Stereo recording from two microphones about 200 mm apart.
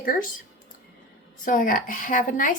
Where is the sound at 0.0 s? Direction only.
45° left (ahead or behind).